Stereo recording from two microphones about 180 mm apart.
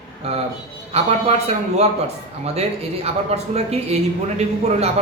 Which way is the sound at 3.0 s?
35° right (ahead or behind).